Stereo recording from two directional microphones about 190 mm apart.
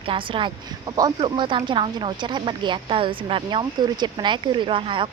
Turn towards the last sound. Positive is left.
turn(degrees=-25)  # may be behind; listen again after turning